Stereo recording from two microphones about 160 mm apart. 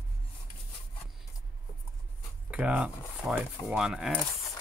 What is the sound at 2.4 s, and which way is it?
Speech, 10° right (ahead or behind).